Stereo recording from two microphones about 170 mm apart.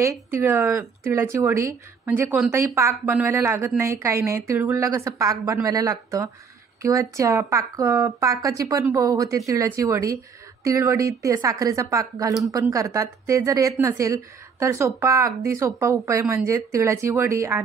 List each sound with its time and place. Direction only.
0.3 s a woman's voice: 15° right (ahead or behind)